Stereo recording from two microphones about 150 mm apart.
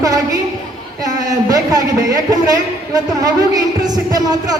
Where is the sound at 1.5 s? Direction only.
25° right (ahead or behind).